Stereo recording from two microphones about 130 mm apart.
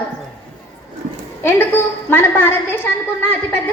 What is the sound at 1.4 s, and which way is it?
A woman's voice, 15° left (ahead or behind).